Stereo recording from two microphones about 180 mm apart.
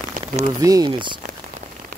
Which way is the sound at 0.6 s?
20° right (ahead or behind).